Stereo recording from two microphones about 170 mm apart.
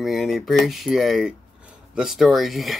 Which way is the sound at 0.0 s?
Centre (ahead or behind).